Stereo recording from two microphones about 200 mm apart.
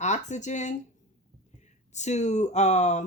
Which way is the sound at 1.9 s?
35° left (ahead or behind).